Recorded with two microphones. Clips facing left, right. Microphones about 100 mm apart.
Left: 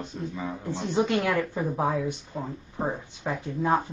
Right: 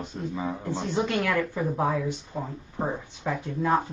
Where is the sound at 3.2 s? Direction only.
15° left (ahead or behind).